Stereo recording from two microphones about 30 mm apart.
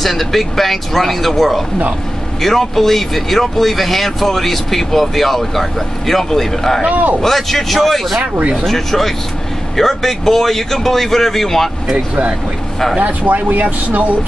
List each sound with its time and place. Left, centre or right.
0.0 s speech: centre
13.0 s speech: right